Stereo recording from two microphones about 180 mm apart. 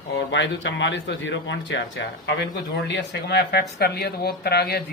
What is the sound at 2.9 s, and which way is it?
Speech, 70° left (ahead or behind).